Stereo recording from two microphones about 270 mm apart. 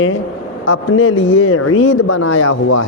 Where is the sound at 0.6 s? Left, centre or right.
Left.